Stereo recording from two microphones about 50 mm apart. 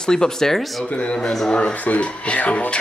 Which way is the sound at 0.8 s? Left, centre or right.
Left.